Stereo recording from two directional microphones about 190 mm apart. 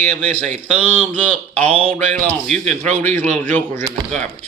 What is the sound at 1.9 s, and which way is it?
A man's voice, 5° left (ahead or behind).